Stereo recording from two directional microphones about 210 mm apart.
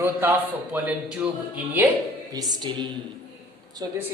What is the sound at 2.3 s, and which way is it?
Speech, 20° right (ahead or behind).